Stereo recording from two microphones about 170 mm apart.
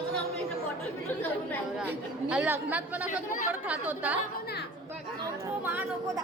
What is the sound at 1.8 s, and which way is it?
Speech, 5° right (ahead or behind).